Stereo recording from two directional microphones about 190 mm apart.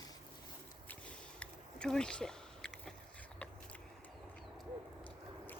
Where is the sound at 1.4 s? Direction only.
5° left (ahead or behind).